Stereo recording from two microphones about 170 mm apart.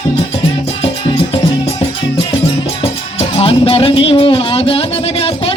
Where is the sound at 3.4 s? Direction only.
35° left (ahead or behind).